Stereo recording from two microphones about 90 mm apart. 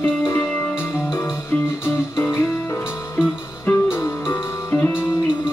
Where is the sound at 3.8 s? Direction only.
25° left (ahead or behind).